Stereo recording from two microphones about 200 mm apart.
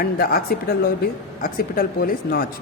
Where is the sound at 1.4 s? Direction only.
45° left (ahead or behind).